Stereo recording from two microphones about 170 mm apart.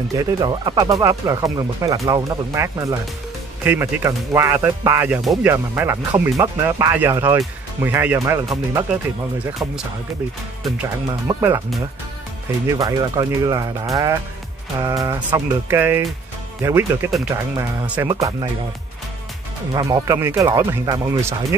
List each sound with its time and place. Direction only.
0.1 s speech: 20° right (ahead or behind)
11.3 s speech: 20° right (ahead or behind)
12.6 s speech: 20° right (ahead or behind)
18.0 s speech: 25° right (ahead or behind)
19.7 s speech: 20° right (ahead or behind)